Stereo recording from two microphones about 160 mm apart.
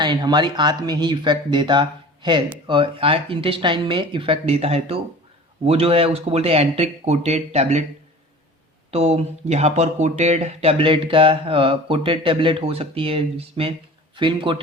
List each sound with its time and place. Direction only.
0.0 s speech: 25° right (ahead or behind); by 7.9 s 45° right (ahead or behind)
8.9 s speech: 40° right (ahead or behind)